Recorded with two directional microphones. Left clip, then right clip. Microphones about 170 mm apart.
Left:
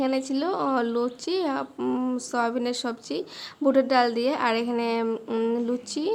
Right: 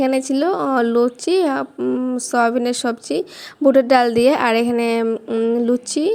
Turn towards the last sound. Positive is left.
turn(degrees=-35)  # may be behind; listen again after turning